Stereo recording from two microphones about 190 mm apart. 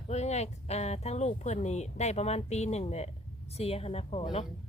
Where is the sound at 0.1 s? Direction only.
35° left (ahead or behind).